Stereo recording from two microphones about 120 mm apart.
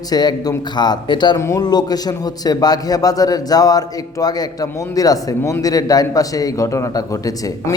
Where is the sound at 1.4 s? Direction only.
30° left (ahead or behind).